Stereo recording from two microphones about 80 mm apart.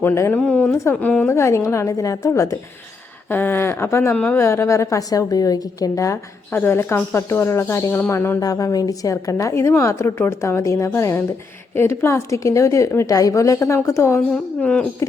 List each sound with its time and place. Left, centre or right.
0.0 s a woman's voice: left
0.3 s speech: centre
0.7 s a woman's voice: left
0.9 s speech: centre
1.3 s a woman's voice: left
3.2 s a woman's voice: left
4.1 s speech: centre
4.4 s a woman's voice: left
6.5 s speech: left
8.4 s a woman's voice: left
14.3 s speech: centre